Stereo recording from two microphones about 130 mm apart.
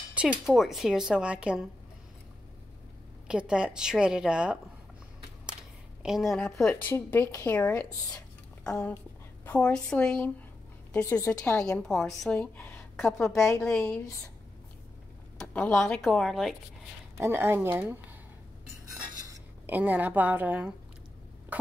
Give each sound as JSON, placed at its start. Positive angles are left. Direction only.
{"t": 0.1, "sound": "speech", "side_deg": -10}
{"t": 3.3, "sound": "a woman's voice", "side_deg": -5}
{"t": 5.5, "sound": "a sound", "side_deg": -5}
{"t": 6.5, "sound": "speech", "side_deg": 5}
{"t": 6.9, "sound": "a woman's voice", "side_deg": 15}
{"t": 9.4, "sound": "a woman's voice", "side_deg": 10}
{"t": 12.4, "sound": "speech", "side_deg": 15}
{"t": 12.9, "sound": "a woman's voice", "side_deg": 0}
{"t": 15.3, "sound": "speech", "side_deg": 10}
{"t": 17.2, "sound": "speech", "side_deg": -20}
{"t": 19.6, "sound": "a woman's voice", "side_deg": -15}